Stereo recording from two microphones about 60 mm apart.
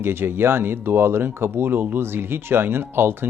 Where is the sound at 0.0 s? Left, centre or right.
Right.